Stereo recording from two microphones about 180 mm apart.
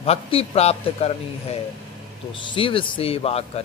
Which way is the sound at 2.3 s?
25° left (ahead or behind).